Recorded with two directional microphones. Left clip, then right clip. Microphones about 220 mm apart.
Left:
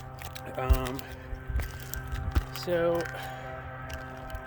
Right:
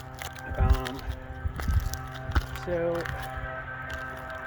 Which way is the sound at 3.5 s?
30° right (ahead or behind).